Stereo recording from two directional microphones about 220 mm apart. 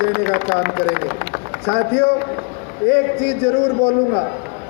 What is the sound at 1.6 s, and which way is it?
A man's voice, 50° left (ahead or behind).